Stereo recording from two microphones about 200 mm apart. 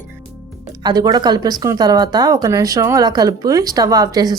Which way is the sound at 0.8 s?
20° right (ahead or behind).